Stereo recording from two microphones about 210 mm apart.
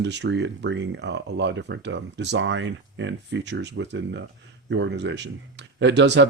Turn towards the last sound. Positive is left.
turn(degrees=-55)  # may be behind; listen again after turning